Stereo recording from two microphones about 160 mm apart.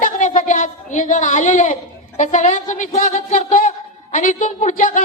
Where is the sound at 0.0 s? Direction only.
50° left (ahead or behind).